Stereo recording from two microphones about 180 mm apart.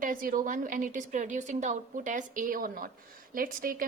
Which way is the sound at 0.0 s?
50° right (ahead or behind).